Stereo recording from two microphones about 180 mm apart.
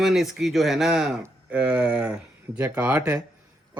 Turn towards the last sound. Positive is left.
turn(degrees=-5)  # may be behind; listen again after turning